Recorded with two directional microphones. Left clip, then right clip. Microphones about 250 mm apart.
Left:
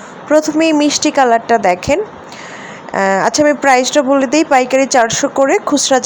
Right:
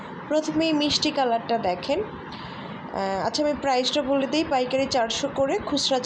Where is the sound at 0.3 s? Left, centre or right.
Left.